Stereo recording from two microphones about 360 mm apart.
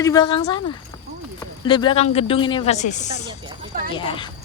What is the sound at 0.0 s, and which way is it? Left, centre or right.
Speech, centre.